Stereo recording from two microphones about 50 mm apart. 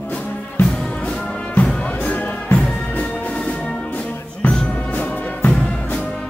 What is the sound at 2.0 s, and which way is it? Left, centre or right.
Music, left.